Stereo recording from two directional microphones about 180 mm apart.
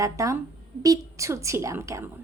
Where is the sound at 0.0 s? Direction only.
15° right (ahead or behind).